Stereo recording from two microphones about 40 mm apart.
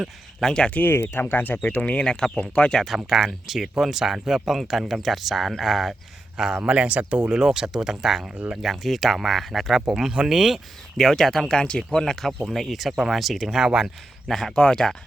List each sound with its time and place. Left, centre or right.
0.4 s speech: centre
0.8 s speech: left
1.8 s speech: left
2.0 s speech: left
2.8 s speech: centre
6.3 s a man's voice: centre
6.7 s speech: right
7.3 s speech: centre
9.8 s speech: centre
10.9 s speech: centre
12.7 s speech: centre
13.7 s speech: centre
14.3 s speech: centre
14.5 s speech: left